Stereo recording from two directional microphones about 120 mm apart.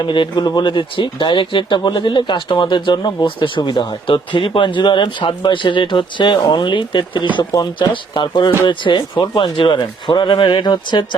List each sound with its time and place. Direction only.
0.0 s speech: 40° left (ahead or behind)